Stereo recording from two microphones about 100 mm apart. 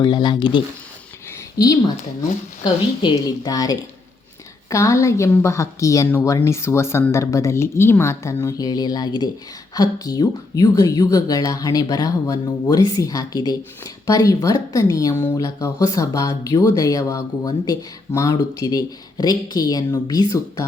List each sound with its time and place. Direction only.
0.0 s a woman's voice: 45° left (ahead or behind)
1.5 s speech: 40° left (ahead or behind)
2.6 s a woman's voice: 50° left (ahead or behind)
3.4 s a woman's voice: 35° left (ahead or behind)